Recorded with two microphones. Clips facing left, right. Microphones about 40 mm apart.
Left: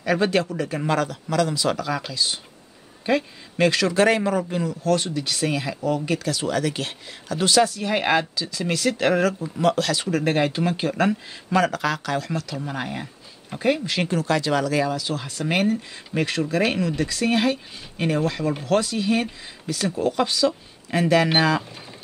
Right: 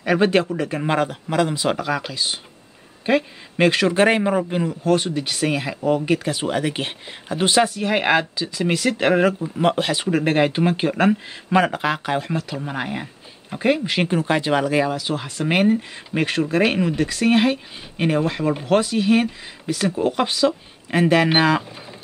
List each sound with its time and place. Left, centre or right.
0.0 s a man's voice: right